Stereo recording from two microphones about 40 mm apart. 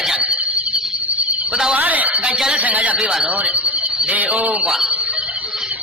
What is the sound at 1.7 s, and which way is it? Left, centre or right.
Speech, right.